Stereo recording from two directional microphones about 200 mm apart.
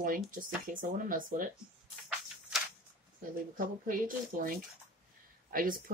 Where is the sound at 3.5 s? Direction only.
45° right (ahead or behind).